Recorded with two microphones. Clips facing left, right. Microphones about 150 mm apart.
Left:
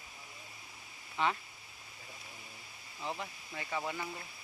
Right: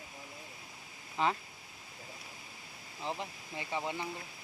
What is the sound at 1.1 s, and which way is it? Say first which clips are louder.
Speech: right 1 dB; 35° right (ahead or behind).